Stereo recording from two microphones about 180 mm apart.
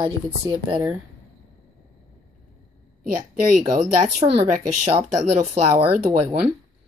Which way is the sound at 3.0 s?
50° right (ahead or behind).